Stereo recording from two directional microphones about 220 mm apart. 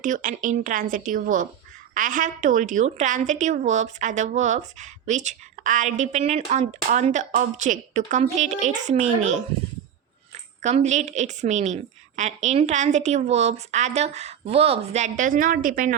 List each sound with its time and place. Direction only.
0.0 s a woman's voice: 35° right (ahead or behind)
10.6 s a woman's voice: 30° right (ahead or behind)